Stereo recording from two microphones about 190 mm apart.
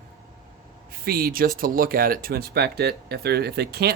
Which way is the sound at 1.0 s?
50° right (ahead or behind).